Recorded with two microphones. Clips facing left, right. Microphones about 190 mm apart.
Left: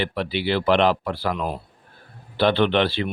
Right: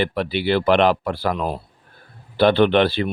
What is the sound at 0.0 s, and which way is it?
Speech, 50° right (ahead or behind).